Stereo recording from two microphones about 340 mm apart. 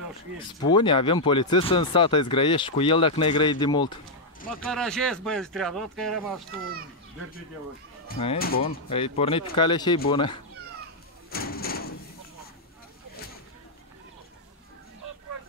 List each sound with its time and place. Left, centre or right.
0.6 s speech: centre
4.6 s speech: centre
8.1 s speech: left
8.8 s speech: centre
11.2 s a sound: left